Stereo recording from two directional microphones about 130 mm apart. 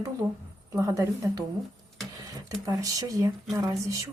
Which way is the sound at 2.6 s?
25° right (ahead or behind).